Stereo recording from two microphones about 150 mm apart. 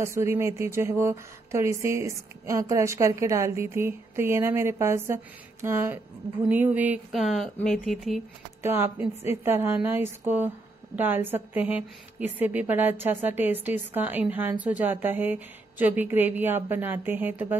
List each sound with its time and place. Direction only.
0.0 s a woman's voice: 20° right (ahead or behind); by 8.2 s centre (ahead or behind)
8.6 s a woman's voice: 15° right (ahead or behind)